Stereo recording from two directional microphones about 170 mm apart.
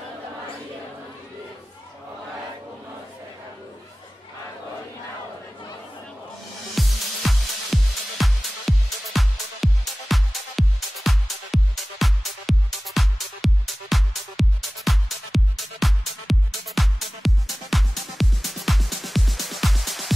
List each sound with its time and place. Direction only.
6.7 s music: centre (ahead or behind)